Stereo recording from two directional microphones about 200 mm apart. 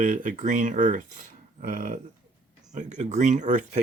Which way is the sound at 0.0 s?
40° right (ahead or behind).